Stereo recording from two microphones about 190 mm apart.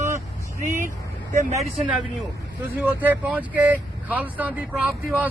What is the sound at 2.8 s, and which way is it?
Speech, 10° right (ahead or behind).